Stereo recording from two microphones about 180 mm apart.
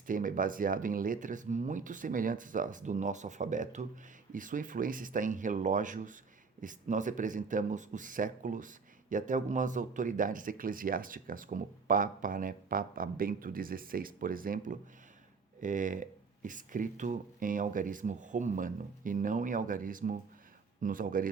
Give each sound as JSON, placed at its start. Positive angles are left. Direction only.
{"t": 0.1, "sound": "speech", "side_deg": -50}